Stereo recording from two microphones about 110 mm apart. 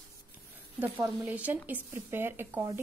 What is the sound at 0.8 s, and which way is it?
Speech, 15° right (ahead or behind).